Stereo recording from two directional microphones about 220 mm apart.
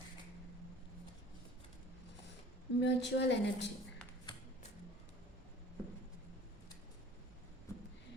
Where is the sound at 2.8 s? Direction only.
50° left (ahead or behind).